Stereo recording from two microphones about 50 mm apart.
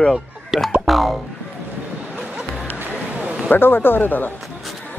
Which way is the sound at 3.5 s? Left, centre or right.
Left.